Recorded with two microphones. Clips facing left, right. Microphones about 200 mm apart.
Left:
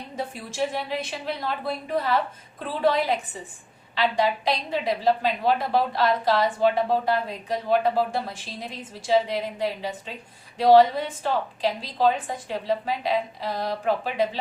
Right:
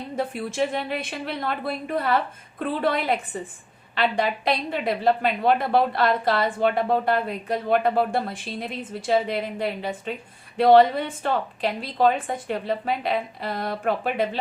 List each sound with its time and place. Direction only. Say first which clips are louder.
0.2 s a woman's voice: right 3 dB; 55° right (ahead or behind)